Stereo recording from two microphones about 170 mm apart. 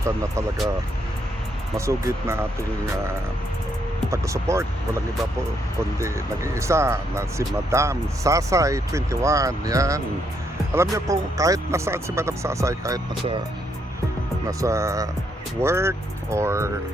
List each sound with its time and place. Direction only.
0.0 s speech: 15° right (ahead or behind)
1.7 s speech: 15° right (ahead or behind)
4.1 s speech: 15° right (ahead or behind)
6.0 s speech: 15° right (ahead or behind)
14.4 s speech: 20° right (ahead or behind)